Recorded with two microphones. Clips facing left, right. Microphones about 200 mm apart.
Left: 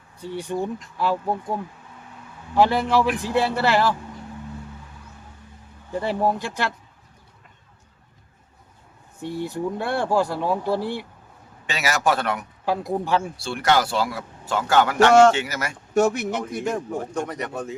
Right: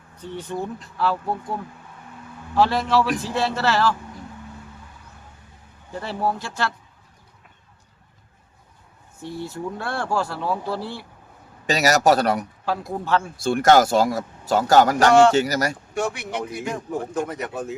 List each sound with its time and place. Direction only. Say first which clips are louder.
0.2 s speech: left 2 dB; 10° left (ahead or behind)
2.6 s speech: left 1 dB; 15° left (ahead or behind)
5.9 s speech: left 3 dB; 15° left (ahead or behind)
9.2 s speech: left 3 dB; 15° left (ahead or behind)
11.6 s a man's voice: right 5 dB; 40° right (ahead or behind)
12.6 s speech: left 4 dB; 15° left (ahead or behind)
13.3 s a man's voice: right 10 dB; 45° right (ahead or behind)
16.0 s speech: left 7 dB; 40° left (ahead or behind)
16.4 s speech: left 2 dB; 5° right (ahead or behind)